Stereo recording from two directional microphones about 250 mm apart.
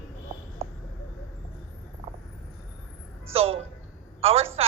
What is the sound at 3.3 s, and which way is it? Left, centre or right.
A woman's voice, right.